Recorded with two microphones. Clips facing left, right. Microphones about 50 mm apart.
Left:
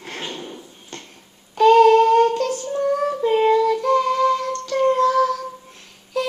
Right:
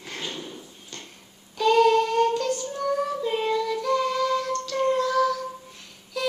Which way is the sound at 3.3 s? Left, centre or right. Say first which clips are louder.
Left 10 dB; left.